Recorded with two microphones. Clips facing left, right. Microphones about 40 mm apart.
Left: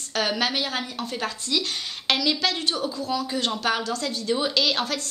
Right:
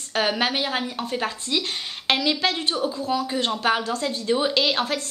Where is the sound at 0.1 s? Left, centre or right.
Right.